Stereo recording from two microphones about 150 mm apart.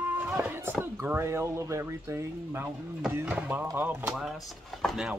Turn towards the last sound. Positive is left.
turn(degrees=-5)  # may be behind; listen again after turning